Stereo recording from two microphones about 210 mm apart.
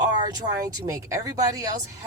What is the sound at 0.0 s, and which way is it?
Speech, 20° right (ahead or behind).